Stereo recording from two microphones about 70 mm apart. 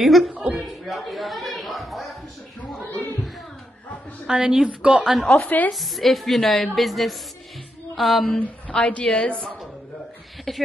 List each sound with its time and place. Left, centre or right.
0.0 s a woman's voice: centre
0.3 s a sound: centre
0.6 s speech: centre
4.3 s a woman's voice: centre
5.0 s a woman's voice: centre
5.3 s speech: left
5.7 s a woman's voice: centre
8.2 s a woman's voice: centre
10.5 s a woman's voice: centre